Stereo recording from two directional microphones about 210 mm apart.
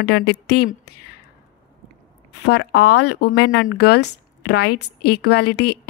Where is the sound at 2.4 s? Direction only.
55° left (ahead or behind).